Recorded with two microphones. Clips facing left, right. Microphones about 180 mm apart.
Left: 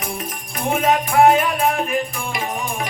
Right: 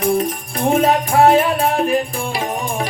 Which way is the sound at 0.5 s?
35° right (ahead or behind).